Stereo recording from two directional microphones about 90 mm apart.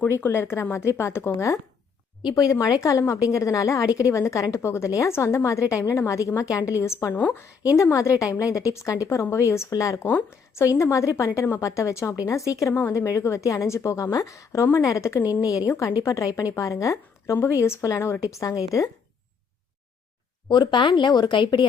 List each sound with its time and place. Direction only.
0.2 s speech: 30° left (ahead or behind)
2.3 s a woman's voice: 40° left (ahead or behind)
7.2 s speech: 20° left (ahead or behind)
7.8 s a woman's voice: 35° left (ahead or behind)
15.2 s speech: 20° right (ahead or behind)
15.4 s a woman's voice: 40° left (ahead or behind)
20.5 s speech: 55° left (ahead or behind)
20.9 s speech: 50° left (ahead or behind)